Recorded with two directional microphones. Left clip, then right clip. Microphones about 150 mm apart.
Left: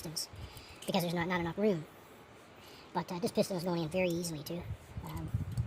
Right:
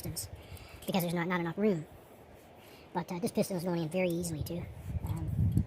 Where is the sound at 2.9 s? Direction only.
25° right (ahead or behind).